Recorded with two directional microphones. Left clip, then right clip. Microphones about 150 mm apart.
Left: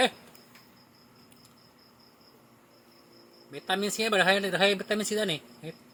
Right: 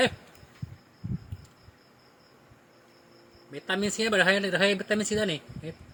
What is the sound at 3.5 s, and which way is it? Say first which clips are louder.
Speech: even; 30° right (ahead or behind).